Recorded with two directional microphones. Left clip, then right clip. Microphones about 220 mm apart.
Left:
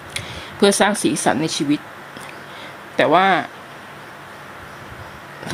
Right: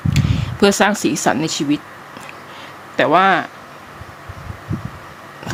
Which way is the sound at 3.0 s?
5° right (ahead or behind).